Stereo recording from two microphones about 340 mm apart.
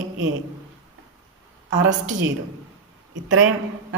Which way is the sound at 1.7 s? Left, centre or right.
Right.